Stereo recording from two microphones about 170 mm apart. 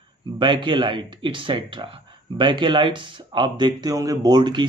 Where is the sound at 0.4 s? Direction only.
30° right (ahead or behind).